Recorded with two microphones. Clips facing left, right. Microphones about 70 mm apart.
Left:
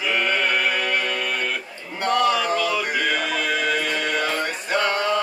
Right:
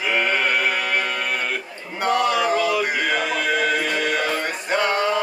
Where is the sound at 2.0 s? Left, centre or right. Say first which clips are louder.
Right 1 dB; centre.